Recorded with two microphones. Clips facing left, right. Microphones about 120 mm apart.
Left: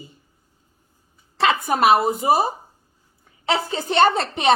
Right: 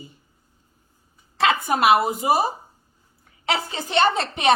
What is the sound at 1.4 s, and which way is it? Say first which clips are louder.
A woman's voice: left 1 dB; 35° left (ahead or behind).